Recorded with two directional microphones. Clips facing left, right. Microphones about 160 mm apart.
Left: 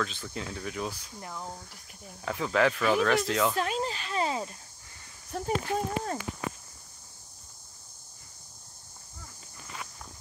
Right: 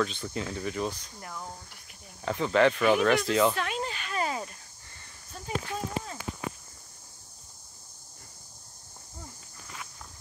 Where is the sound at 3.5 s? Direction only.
35° left (ahead or behind).